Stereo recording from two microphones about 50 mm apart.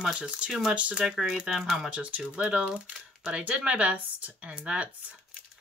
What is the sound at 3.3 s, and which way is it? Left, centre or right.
Speech, right.